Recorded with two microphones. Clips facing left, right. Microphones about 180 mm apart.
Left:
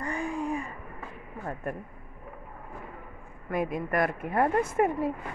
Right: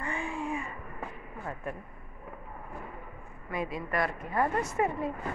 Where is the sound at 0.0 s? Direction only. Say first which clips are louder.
Left 3 dB; 40° left (ahead or behind).